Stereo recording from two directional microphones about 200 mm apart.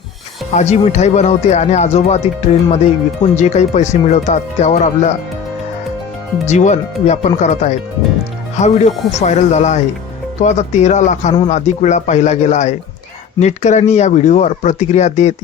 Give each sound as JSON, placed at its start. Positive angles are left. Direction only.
{"t": 0.5, "sound": "speech", "side_deg": 35}
{"t": 6.4, "sound": "speech", "side_deg": 35}